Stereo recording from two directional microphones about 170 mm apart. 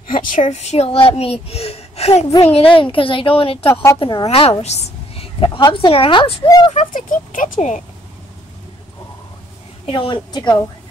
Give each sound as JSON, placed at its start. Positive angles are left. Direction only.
{"t": 0.1, "sound": "a sound", "side_deg": 50}
{"t": 0.4, "sound": "a child's voice", "side_deg": 40}
{"t": 6.7, "sound": "speech", "side_deg": 45}
{"t": 9.8, "sound": "a woman's voice", "side_deg": 30}